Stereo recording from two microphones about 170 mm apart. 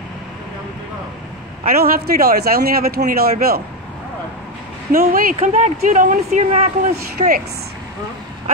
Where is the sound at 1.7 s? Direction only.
60° right (ahead or behind).